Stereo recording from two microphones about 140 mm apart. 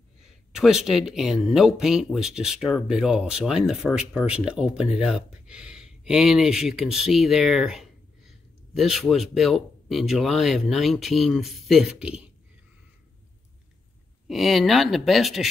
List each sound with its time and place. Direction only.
0.5 s speech: 5° right (ahead or behind)
14.2 s speech: centre (ahead or behind)